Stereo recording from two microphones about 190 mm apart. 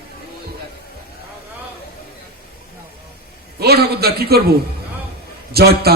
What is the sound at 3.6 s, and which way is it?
Music, 55° right (ahead or behind).